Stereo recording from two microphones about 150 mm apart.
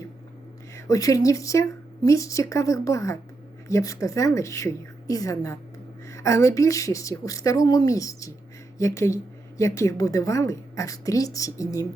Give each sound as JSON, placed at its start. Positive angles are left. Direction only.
{"t": 0.8, "sound": "speech", "side_deg": 20}